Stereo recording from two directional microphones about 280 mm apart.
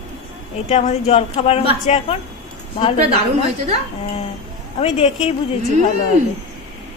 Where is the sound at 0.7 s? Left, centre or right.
Left.